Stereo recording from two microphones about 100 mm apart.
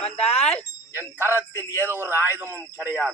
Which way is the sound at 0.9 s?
20° right (ahead or behind).